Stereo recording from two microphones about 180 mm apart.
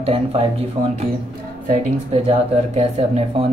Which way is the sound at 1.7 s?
35° right (ahead or behind).